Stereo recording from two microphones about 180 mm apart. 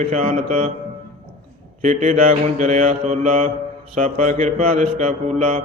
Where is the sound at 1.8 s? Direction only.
45° right (ahead or behind).